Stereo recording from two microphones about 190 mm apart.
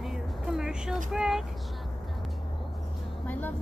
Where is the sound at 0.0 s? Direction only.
Centre (ahead or behind).